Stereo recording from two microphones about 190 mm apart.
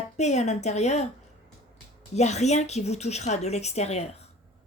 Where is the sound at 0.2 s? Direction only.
35° left (ahead or behind).